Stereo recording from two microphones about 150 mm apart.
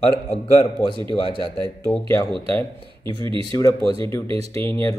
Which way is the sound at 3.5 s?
25° left (ahead or behind).